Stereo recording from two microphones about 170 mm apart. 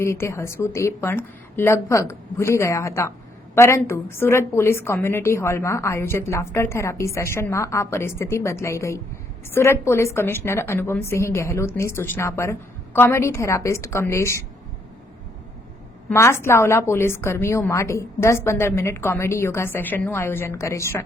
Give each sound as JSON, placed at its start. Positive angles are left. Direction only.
{"t": 0.0, "sound": "a woman's voice", "side_deg": 15}
{"t": 16.0, "sound": "a woman's voice", "side_deg": 15}